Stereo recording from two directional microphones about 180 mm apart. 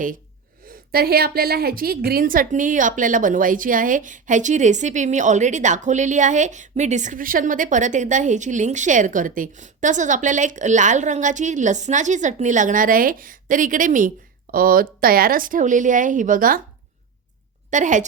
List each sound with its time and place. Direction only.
0.7 s a woman's voice: 60° right (ahead or behind)
17.7 s a woman's voice: 45° right (ahead or behind)